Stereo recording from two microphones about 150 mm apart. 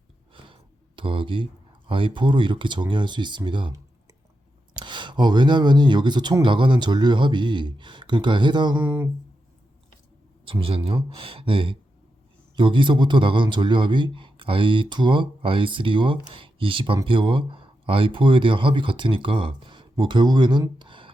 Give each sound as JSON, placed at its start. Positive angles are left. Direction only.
{"t": 0.3, "sound": "a sound", "side_deg": -35}
{"t": 1.9, "sound": "a man's voice", "side_deg": -35}
{"t": 4.7, "sound": "a man's voice", "side_deg": -30}
{"t": 8.7, "sound": "speech", "side_deg": -10}
{"t": 10.4, "sound": "a man's voice", "side_deg": -35}